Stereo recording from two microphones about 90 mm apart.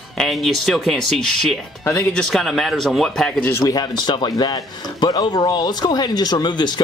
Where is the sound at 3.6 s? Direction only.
50° left (ahead or behind).